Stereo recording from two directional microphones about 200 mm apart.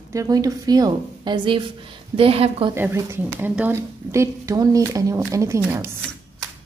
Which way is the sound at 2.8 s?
15° right (ahead or behind).